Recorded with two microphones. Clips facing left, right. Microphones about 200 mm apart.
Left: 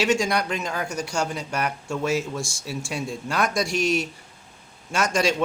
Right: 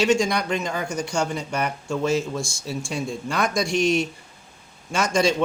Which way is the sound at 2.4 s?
80° left.